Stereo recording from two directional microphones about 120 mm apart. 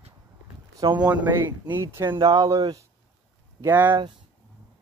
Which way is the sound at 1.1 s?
15° right (ahead or behind).